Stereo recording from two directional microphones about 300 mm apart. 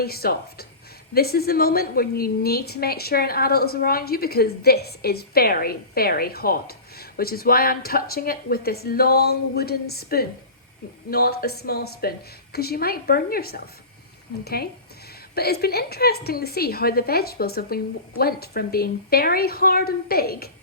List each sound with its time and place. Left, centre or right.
0.0 s a woman's voice: left